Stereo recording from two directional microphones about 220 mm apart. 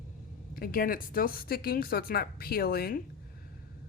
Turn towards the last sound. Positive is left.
turn(degrees=45)  # may be behind; listen again after turning